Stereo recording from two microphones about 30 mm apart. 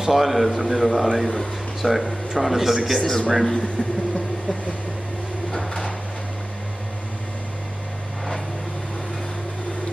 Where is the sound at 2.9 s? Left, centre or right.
Centre.